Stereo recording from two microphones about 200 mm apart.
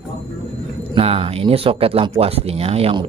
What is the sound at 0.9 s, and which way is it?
Speech, 30° right (ahead or behind).